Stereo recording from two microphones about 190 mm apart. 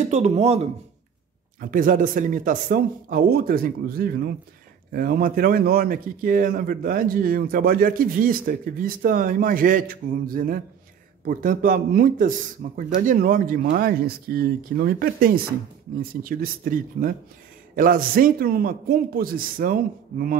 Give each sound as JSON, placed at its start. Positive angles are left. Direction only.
{"t": 0.1, "sound": "speech", "side_deg": -35}
{"t": 1.6, "sound": "a man's voice", "side_deg": -45}